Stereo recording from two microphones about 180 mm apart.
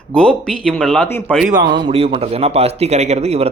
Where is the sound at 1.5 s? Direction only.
25° right (ahead or behind).